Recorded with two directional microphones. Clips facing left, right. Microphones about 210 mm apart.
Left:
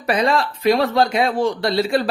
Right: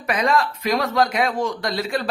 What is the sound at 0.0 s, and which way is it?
A man's voice, 30° left (ahead or behind).